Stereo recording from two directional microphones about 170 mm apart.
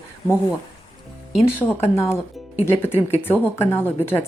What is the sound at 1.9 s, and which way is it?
Speech, 15° left (ahead or behind).